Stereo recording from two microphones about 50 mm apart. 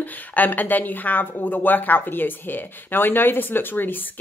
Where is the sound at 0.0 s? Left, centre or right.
Left.